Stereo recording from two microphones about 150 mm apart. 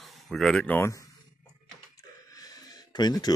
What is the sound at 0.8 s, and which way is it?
Speech, 20° left (ahead or behind).